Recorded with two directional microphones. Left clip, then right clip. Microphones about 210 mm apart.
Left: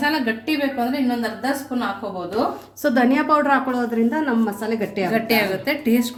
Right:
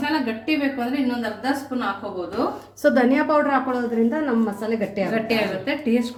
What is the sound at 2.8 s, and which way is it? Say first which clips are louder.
A woman's voice: right 1 dB; 5° left (ahead or behind).